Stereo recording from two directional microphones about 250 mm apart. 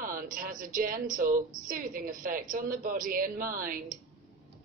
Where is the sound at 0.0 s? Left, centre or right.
Right.